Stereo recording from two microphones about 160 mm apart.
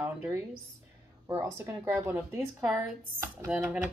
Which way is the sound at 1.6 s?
15° right (ahead or behind).